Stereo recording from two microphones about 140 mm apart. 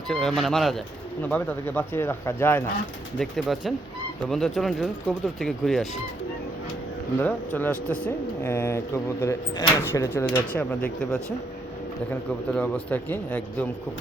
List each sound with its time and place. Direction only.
0.1 s speech: 5° left (ahead or behind)
3.2 s speech: centre (ahead or behind)
7.2 s speech: 10° left (ahead or behind)
12.5 s speech: 5° left (ahead or behind)